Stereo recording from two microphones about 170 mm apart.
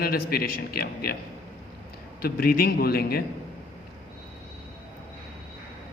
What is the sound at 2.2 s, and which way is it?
A man's voice, 60° left (ahead or behind).